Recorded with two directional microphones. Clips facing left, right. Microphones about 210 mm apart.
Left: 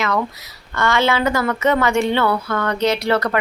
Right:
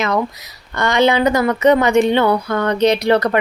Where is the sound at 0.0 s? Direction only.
20° right (ahead or behind).